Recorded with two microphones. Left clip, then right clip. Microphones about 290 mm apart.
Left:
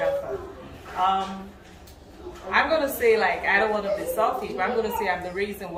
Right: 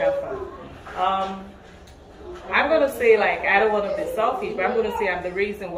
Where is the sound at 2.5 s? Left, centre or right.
Centre.